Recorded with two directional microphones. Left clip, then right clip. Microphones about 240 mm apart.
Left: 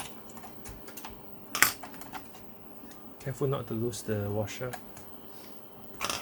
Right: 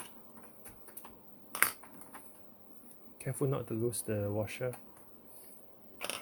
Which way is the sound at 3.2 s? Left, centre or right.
Right.